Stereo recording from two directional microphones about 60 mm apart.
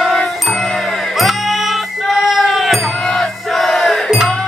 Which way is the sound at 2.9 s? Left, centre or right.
Centre.